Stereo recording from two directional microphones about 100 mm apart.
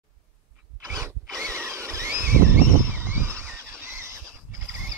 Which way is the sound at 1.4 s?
25° right (ahead or behind).